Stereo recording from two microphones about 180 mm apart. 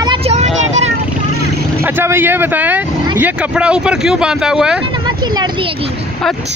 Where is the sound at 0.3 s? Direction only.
40° right (ahead or behind).